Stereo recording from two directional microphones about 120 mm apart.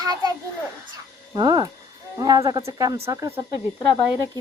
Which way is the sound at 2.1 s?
30° right (ahead or behind).